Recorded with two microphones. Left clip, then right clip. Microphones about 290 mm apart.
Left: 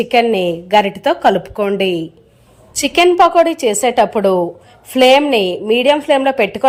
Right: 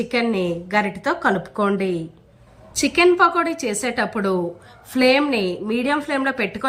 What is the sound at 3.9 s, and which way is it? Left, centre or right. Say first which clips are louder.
Speech: left 9 dB; left.